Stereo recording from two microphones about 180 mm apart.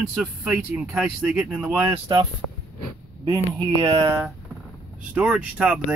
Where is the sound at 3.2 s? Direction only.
25° right (ahead or behind).